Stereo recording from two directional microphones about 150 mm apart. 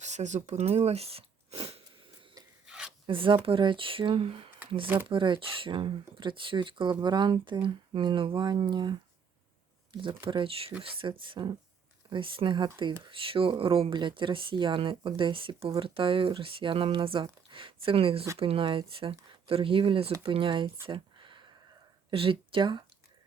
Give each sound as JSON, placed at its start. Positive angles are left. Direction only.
{"t": 0.0, "sound": "speech", "side_deg": -50}
{"t": 2.6, "sound": "rub", "side_deg": -5}
{"t": 3.1, "sound": "speech", "side_deg": -35}
{"t": 20.8, "sound": "a sound", "side_deg": -35}
{"t": 22.1, "sound": "speech", "side_deg": -35}